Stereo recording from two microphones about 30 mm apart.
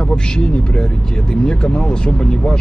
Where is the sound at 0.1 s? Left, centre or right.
Left.